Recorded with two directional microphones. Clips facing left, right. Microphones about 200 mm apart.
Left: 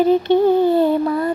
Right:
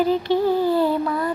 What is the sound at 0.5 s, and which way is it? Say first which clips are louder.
Mantra: left 5 dB; 20° left (ahead or behind).